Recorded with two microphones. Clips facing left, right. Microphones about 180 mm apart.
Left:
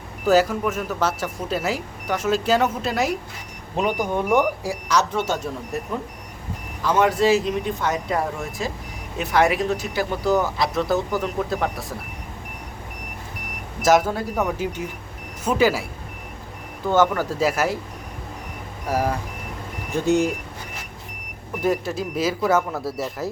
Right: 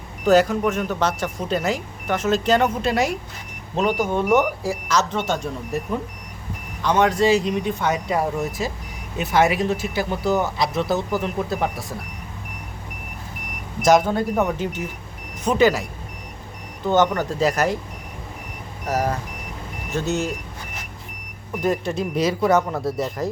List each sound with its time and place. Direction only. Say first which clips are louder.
0.3 s speech: right 2 dB; 5° left (ahead or behind)
3.8 s speech: right 2 dB; 15° left (ahead or behind); by 11.9 s centre (ahead or behind)
13.8 s speech: right 2 dB; 5° left (ahead or behind)
17.0 s speech: even; 5° left (ahead or behind)
18.9 s speech: even; 10° left (ahead or behind)
21.6 s speech: even; 5° left (ahead or behind)